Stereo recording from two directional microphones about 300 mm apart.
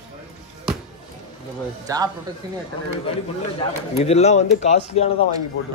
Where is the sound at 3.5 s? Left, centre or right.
Left.